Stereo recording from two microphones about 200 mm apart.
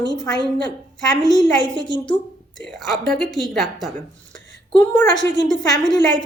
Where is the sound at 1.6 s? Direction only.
20° left (ahead or behind).